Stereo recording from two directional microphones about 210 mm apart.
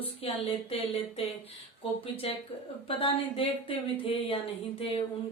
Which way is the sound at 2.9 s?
25° left (ahead or behind).